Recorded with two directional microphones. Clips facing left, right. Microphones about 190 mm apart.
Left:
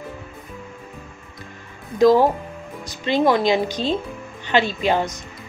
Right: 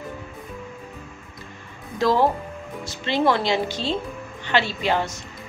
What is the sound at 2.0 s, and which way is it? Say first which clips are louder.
Speech: left 5 dB; 15° left (ahead or behind).